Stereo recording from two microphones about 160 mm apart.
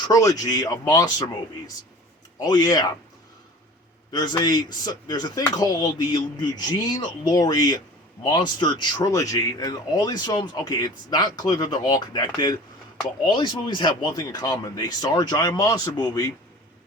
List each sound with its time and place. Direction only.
0.0 s speech: 20° left (ahead or behind)
2.4 s speech: 25° left (ahead or behind)
4.1 s speech: 25° left (ahead or behind)